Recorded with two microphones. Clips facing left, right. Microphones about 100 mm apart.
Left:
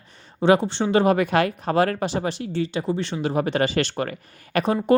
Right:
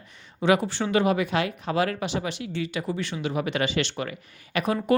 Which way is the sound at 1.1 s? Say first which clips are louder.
Left 5 dB; 50° left (ahead or behind).